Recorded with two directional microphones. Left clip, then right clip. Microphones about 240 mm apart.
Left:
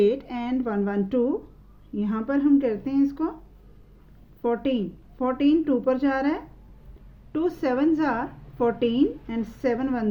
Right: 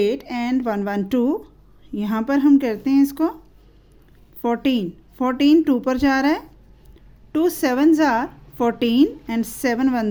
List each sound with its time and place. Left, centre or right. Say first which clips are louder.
0.0 s a woman's voice: right 1 dB; right
4.4 s a woman's voice: right 4 dB; right